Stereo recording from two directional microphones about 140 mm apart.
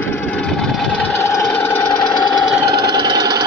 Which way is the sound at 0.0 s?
15° left (ahead or behind).